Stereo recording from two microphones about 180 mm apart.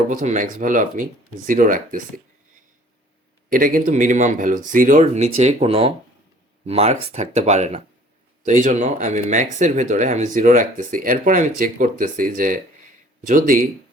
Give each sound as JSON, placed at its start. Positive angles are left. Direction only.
{"t": 0.1, "sound": "speech", "side_deg": -45}
{"t": 3.5, "sound": "speech", "side_deg": -50}